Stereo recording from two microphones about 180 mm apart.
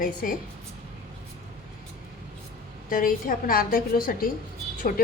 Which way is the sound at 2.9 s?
50° left (ahead or behind).